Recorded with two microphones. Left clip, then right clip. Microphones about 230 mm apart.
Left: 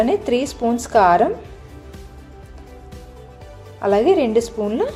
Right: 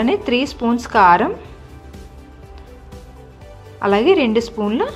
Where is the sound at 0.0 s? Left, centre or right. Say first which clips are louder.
Even; centre.